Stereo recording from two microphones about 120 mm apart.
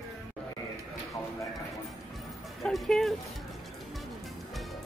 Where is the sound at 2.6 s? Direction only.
Centre (ahead or behind).